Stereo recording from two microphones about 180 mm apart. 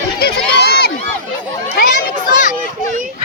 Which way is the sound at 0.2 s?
65° left (ahead or behind).